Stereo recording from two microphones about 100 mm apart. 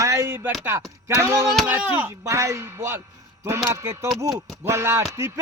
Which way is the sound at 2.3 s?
30° right (ahead or behind).